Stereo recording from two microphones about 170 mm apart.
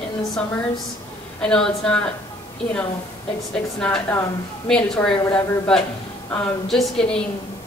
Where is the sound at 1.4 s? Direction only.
5° left (ahead or behind).